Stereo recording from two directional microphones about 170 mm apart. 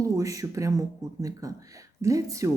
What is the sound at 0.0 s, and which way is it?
Speech, 20° right (ahead or behind).